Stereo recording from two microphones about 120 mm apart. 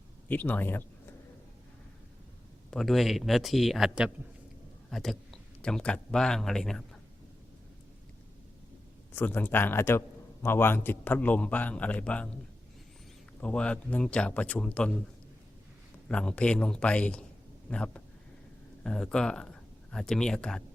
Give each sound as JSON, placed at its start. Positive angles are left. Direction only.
{"t": 0.3, "sound": "a man's voice", "side_deg": 15}
{"t": 2.6, "sound": "speech", "side_deg": 0}
{"t": 9.1, "sound": "a man's voice", "side_deg": 15}
{"t": 13.4, "sound": "a man's voice", "side_deg": 10}
{"t": 16.0, "sound": "a man's voice", "side_deg": 10}